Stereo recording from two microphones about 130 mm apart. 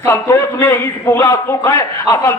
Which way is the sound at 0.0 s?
20° left (ahead or behind).